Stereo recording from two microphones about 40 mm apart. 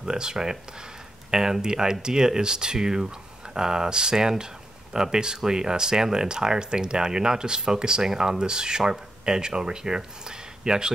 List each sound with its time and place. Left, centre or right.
0.0 s speech: centre